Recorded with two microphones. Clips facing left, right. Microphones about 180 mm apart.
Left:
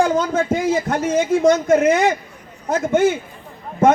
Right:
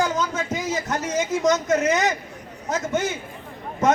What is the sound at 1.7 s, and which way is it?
Speech, 10° left (ahead or behind).